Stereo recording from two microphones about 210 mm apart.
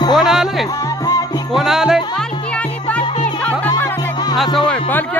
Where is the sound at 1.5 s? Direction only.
Centre (ahead or behind).